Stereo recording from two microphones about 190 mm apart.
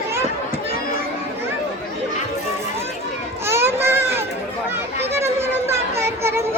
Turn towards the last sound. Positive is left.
turn(degrees=-15)  # may be behind; listen again after turning